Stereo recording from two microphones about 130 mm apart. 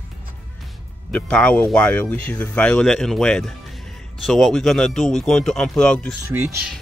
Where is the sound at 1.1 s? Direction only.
10° left (ahead or behind).